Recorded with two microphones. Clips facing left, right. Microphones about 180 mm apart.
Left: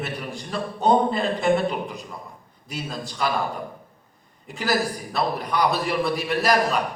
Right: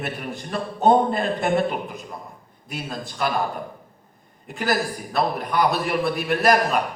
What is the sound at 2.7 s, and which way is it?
Speech, centre (ahead or behind).